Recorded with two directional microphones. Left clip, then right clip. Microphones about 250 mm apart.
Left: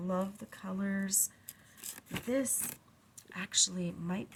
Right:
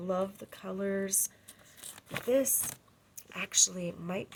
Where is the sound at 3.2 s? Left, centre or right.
Right.